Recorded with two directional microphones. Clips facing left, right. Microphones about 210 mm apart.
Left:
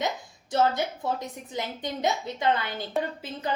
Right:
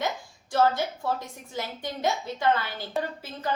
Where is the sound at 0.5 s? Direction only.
20° left (ahead or behind).